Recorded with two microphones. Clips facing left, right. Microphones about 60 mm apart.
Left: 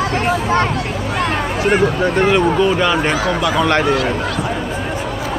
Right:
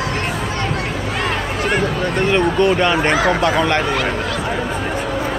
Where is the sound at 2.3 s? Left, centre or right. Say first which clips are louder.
Left 1 dB; centre.